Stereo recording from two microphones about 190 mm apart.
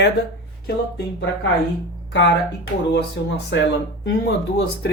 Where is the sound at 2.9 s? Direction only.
70° left (ahead or behind).